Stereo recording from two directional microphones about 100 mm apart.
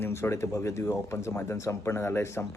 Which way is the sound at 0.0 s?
25° left (ahead or behind).